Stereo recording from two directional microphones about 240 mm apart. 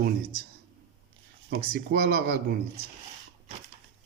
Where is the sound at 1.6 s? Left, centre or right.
Right.